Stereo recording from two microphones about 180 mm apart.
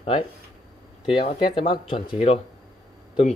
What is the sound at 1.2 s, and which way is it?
Speech, 30° left (ahead or behind).